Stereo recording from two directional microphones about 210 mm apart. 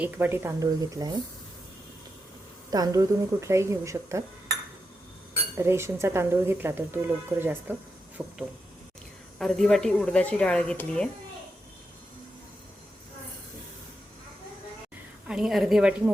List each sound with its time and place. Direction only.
0.0 s speech: 10° right (ahead or behind)
2.6 s speech: 20° right (ahead or behind)
5.5 s speech: 10° right (ahead or behind)
9.4 s speech: centre (ahead or behind)
15.3 s speech: centre (ahead or behind)